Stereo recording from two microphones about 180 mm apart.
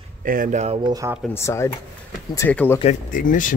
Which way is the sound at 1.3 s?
15° left (ahead or behind).